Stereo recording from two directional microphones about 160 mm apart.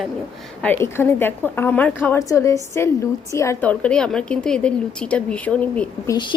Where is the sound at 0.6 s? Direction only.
15° left (ahead or behind).